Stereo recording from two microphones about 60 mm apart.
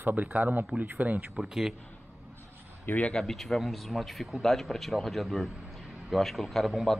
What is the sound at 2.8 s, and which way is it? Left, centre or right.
Speech, left.